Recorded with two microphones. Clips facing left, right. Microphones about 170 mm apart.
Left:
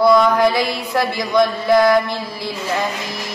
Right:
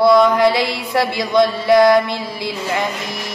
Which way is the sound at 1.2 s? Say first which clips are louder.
Right 1 dB; 20° right (ahead or behind).